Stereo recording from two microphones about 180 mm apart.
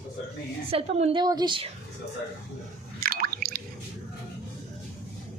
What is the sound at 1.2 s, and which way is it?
Speech, 25° right (ahead or behind).